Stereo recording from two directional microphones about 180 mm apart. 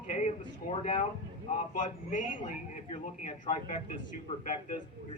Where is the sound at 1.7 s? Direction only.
45° left (ahead or behind).